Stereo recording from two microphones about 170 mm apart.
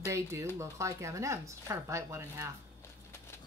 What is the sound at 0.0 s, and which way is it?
Speech, 15° right (ahead or behind).